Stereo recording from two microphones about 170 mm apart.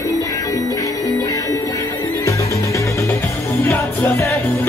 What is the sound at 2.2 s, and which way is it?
Music, 15° left (ahead or behind).